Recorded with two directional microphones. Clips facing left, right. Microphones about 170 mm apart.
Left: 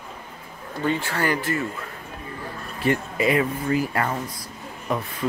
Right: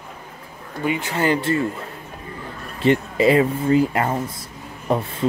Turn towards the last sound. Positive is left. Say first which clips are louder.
# right 5 dB
turn(degrees=-30)  # may be behind; listen again after turning